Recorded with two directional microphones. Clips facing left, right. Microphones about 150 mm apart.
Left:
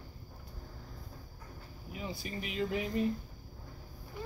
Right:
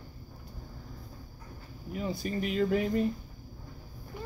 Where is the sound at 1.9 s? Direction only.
45° right (ahead or behind).